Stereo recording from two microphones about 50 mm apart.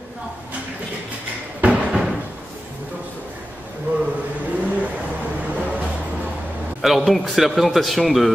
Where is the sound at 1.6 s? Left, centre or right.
Right.